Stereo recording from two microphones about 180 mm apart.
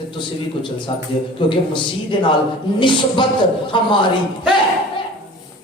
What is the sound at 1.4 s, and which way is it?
Speech, 25° left (ahead or behind).